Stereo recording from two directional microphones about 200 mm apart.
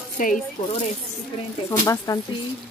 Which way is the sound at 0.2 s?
40° left (ahead or behind).